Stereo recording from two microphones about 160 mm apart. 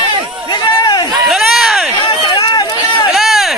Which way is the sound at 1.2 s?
Centre (ahead or behind).